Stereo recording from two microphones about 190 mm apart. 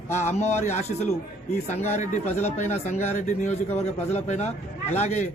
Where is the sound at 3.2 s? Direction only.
40° left (ahead or behind).